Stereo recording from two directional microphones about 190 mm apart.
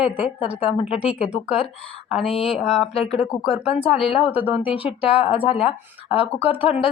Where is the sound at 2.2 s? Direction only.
30° left (ahead or behind).